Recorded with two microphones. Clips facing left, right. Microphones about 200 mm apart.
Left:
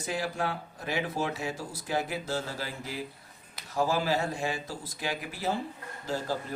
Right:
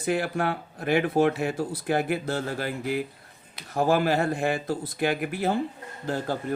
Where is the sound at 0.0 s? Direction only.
60° right (ahead or behind).